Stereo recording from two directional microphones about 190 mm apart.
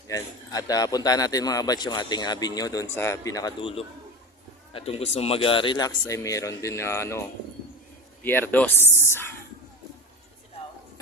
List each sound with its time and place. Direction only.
0.1 s a man's voice: 20° left (ahead or behind)